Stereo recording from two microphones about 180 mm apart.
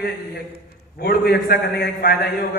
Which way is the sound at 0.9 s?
60° left (ahead or behind).